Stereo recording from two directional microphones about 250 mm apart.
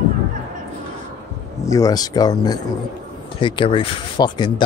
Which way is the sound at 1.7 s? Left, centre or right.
Centre.